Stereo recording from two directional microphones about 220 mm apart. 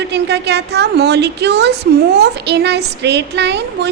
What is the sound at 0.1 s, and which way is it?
A woman's voice, 50° right (ahead or behind).